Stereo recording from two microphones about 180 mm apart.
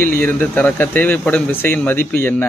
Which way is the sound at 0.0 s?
10° left (ahead or behind).